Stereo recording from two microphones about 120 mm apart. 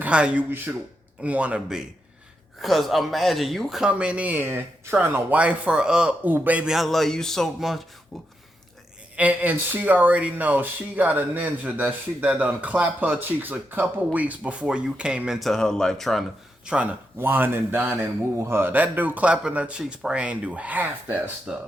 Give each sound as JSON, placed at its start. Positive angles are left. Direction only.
{"t": 0.0, "sound": "speech", "side_deg": -10}
{"t": 9.1, "sound": "speech", "side_deg": -15}
{"t": 16.6, "sound": "speech", "side_deg": -10}